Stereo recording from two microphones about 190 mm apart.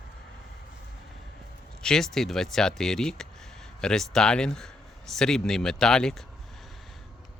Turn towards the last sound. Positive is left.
turn(degrees=5)  # may be behind; listen again after turning